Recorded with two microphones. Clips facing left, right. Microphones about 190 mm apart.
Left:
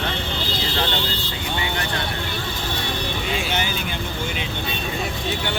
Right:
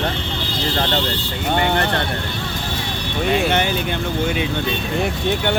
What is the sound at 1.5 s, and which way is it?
Speech, 55° right (ahead or behind).